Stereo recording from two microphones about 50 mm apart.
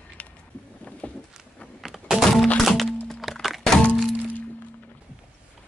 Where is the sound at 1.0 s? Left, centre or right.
Left.